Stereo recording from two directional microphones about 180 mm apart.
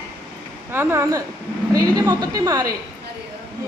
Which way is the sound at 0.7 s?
15° right (ahead or behind).